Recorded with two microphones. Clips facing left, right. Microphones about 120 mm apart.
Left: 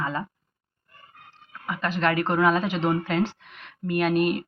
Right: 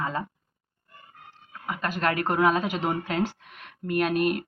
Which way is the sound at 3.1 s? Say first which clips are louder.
Left 2 dB; 45° right (ahead or behind).